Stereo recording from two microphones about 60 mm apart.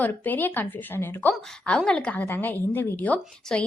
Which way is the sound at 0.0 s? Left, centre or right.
Left.